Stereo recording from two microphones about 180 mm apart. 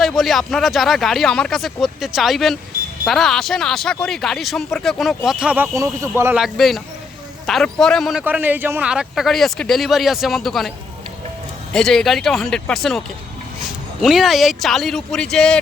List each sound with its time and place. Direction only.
0.0 s speech: centre (ahead or behind); by 6.3 s 15° right (ahead or behind)
6.3 s speech: centre (ahead or behind)
8.2 s speech: 10° right (ahead or behind)
11.7 s speech: 5° left (ahead or behind)